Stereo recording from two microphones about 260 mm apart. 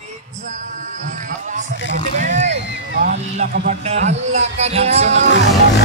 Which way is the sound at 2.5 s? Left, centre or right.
Right.